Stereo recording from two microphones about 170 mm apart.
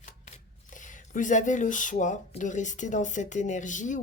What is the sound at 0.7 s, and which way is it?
Speech, 50° left (ahead or behind).